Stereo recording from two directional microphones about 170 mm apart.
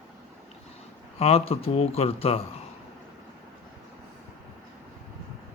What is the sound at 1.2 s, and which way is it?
Speech, 35° left (ahead or behind).